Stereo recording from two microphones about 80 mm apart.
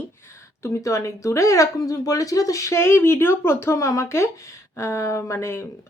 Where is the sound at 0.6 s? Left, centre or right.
Left.